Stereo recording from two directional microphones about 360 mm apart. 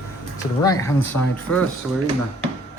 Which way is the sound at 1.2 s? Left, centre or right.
Left.